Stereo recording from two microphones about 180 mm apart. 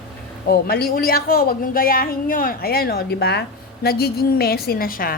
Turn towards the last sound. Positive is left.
turn(degrees=55)  # may be behind; listen again after turning